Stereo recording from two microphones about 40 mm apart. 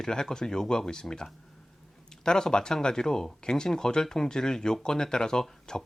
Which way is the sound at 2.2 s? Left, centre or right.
Centre.